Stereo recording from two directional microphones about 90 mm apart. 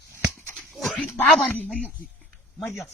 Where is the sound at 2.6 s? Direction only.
Centre (ahead or behind).